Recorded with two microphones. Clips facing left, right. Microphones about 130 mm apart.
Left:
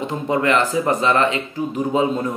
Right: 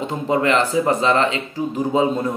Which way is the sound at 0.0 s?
30° right (ahead or behind).